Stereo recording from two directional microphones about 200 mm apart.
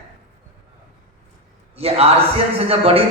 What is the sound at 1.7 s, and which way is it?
A man's voice, 30° right (ahead or behind).